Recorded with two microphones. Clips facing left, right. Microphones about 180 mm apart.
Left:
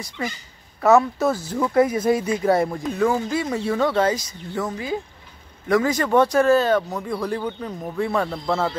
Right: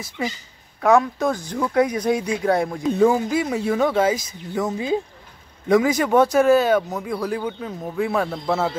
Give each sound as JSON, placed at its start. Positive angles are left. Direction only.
{"t": 0.2, "sound": "speech", "side_deg": -10}
{"t": 0.7, "sound": "speech", "side_deg": 5}
{"t": 3.0, "sound": "speech", "side_deg": -15}